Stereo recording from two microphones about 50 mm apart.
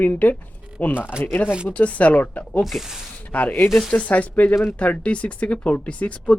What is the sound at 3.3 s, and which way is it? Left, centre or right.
Speech, left.